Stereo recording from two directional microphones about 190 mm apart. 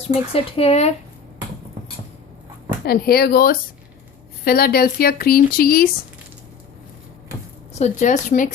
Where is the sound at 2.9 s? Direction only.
55° left (ahead or behind).